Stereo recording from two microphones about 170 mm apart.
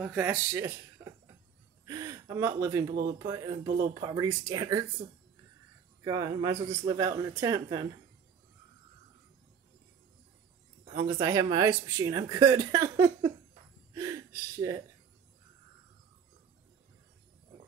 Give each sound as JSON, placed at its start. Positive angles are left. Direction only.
{"t": 0.0, "sound": "speech", "side_deg": -10}
{"t": 1.9, "sound": "gasp", "side_deg": -20}
{"t": 2.9, "sound": "speech", "side_deg": -60}
{"t": 3.2, "sound": "speech", "side_deg": -20}
{"t": 6.0, "sound": "speech", "side_deg": -25}
{"t": 11.1, "sound": "speech", "side_deg": -20}
{"t": 13.9, "sound": "a sound", "side_deg": -20}